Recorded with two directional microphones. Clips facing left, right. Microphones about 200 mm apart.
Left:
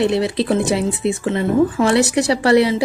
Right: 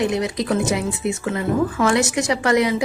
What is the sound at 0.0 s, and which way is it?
A woman's voice, 30° left (ahead or behind).